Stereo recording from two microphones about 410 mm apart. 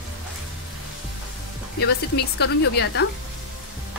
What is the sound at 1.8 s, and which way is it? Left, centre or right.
Speech, left.